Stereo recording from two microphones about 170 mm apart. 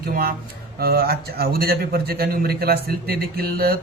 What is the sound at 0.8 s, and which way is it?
A man's voice, 65° right (ahead or behind).